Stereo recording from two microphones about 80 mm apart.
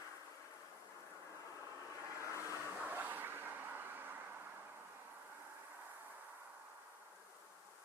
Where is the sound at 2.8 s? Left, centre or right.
Right.